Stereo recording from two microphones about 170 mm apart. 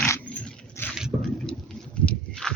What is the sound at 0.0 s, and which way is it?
Dog, 10° left (ahead or behind).